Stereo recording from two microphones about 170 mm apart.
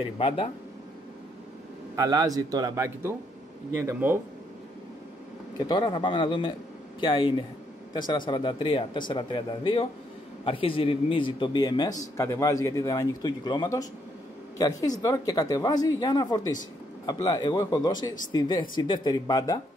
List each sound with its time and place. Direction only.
2.0 s speech: 20° right (ahead or behind)
5.7 s a man's voice: 25° left (ahead or behind)